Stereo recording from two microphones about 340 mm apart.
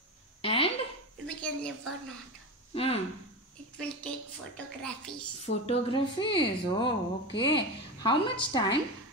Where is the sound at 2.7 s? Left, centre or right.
Centre.